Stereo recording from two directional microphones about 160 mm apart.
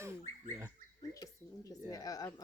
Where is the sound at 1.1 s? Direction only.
20° left (ahead or behind).